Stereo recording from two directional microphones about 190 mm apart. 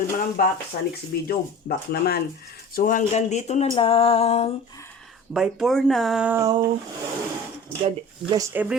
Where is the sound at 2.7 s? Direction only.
45° left (ahead or behind).